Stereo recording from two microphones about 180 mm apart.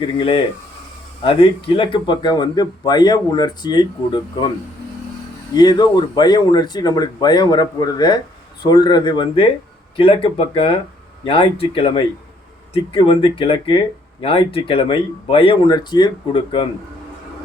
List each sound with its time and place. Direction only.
0.0 s speech: 30° left (ahead or behind)
5.5 s speech: 25° left (ahead or behind)